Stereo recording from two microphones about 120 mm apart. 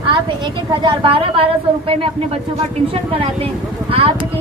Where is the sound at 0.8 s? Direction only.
45° right (ahead or behind).